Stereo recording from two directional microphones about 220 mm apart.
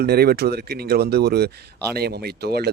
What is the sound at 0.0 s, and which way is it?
Speech, 45° right (ahead or behind).